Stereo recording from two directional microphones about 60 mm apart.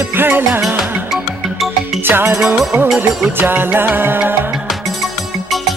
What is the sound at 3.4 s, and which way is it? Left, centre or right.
Speech, right.